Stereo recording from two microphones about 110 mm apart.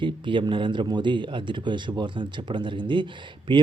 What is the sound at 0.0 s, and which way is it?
Speech, 50° right (ahead or behind).